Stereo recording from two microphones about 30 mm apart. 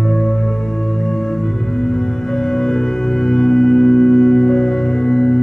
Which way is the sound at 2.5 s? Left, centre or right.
Centre.